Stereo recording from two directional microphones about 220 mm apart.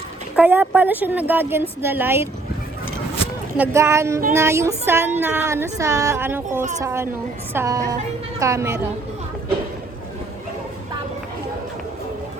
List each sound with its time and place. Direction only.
0.3 s speech: 10° right (ahead or behind)
3.6 s speech: 10° right (ahead or behind)